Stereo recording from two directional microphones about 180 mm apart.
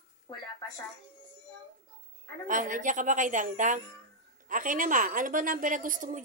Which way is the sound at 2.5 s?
45° right (ahead or behind).